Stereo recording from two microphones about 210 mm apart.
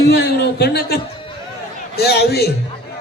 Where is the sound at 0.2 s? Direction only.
50° left (ahead or behind).